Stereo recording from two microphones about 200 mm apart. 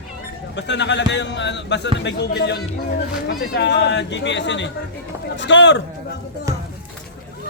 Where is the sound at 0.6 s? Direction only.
60° left (ahead or behind).